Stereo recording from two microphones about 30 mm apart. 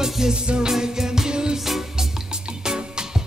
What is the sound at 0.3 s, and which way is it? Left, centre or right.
Music, right.